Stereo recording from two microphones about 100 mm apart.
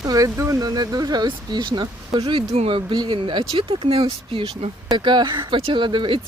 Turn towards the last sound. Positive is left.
turn(degrees=-55)  # may be behind; listen again after turning